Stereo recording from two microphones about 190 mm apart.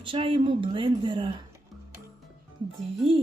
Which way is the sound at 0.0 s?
25° right (ahead or behind).